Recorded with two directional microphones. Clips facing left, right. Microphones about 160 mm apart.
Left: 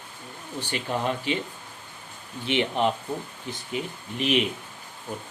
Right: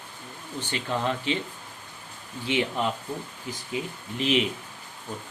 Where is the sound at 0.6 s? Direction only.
15° left (ahead or behind).